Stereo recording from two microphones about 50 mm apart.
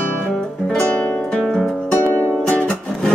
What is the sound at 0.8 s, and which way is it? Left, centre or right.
Music, left.